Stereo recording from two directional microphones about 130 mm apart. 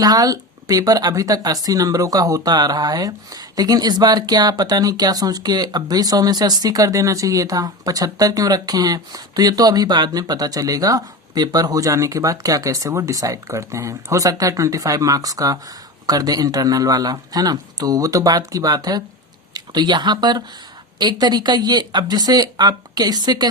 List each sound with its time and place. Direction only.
0.0 s speech: 30° right (ahead or behind)